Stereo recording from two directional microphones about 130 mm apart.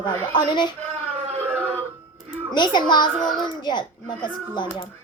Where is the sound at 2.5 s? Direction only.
35° left (ahead or behind).